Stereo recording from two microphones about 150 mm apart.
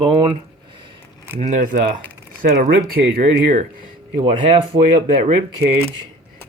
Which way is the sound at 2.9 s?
80° right.